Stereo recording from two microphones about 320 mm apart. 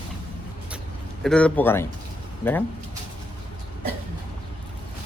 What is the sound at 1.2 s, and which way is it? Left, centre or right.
Speech, centre.